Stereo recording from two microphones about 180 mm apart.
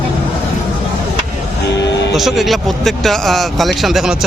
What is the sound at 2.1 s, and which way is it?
Speech, centre (ahead or behind).